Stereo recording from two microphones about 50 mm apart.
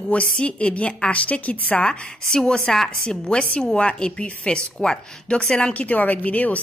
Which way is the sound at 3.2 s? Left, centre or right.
Centre.